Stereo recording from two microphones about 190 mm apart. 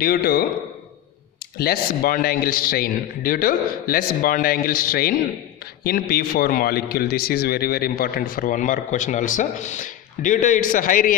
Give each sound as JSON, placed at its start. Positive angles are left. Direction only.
{"t": 0.0, "sound": "a man's voice", "side_deg": 55}
{"t": 1.6, "sound": "a man's voice", "side_deg": 55}